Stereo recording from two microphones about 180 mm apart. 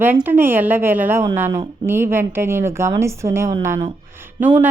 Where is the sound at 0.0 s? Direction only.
10° right (ahead or behind).